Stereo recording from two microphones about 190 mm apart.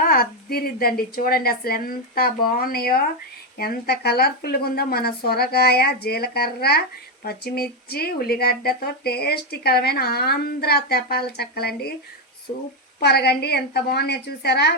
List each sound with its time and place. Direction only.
0.0 s a woman's voice: 50° left (ahead or behind)
13.0 s speech: 60° left (ahead or behind)